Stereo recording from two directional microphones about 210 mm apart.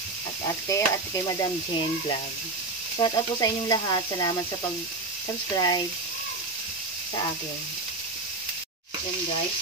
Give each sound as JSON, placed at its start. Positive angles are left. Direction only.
{"t": 0.7, "sound": "stir", "side_deg": 15}
{"t": 3.0, "sound": "speech", "side_deg": 20}
{"t": 5.6, "sound": "stir", "side_deg": 15}